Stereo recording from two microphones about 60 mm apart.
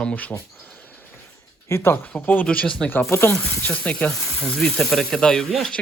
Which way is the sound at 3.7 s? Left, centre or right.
Left.